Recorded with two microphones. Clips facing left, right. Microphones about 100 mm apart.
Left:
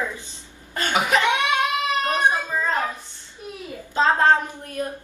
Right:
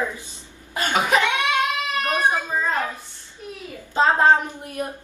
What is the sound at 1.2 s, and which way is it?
Cat, 20° left (ahead or behind).